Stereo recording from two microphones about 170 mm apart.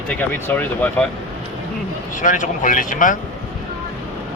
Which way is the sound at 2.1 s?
50° left (ahead or behind).